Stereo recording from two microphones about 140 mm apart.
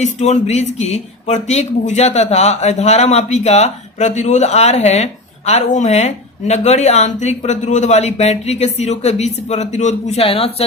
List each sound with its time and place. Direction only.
0.0 s speech: 55° left (ahead or behind)